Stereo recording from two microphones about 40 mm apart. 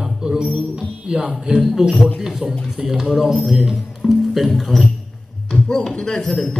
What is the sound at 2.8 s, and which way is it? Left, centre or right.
Speech, centre.